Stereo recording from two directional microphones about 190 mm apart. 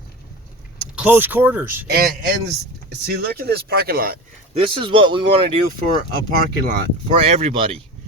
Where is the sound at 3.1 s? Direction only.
55° right (ahead or behind).